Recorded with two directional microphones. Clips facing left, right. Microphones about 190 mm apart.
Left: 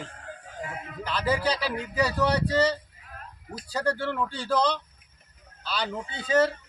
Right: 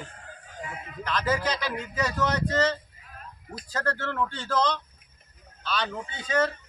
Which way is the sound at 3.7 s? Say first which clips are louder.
Left 2 dB; 10° left (ahead or behind).